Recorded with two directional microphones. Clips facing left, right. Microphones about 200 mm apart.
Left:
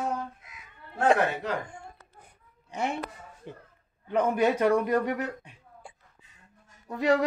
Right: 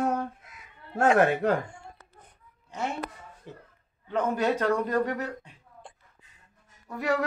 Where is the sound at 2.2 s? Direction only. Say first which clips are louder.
Even; 10° left (ahead or behind).